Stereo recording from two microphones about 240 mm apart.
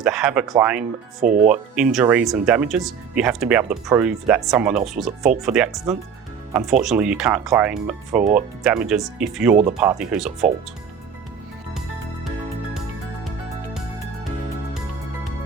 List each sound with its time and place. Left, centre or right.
0.0 s speech: centre
8.2 s speech: right
8.6 s speech: centre